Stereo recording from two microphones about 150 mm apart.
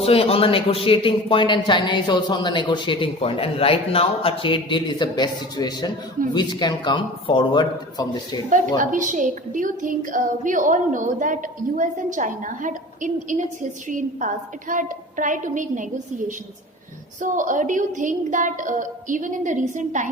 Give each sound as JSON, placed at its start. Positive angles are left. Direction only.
{"t": 0.0, "sound": "a man's voice", "side_deg": 40}
{"t": 8.4, "sound": "a woman's voice", "side_deg": -60}
{"t": 17.2, "sound": "a woman's voice", "side_deg": -60}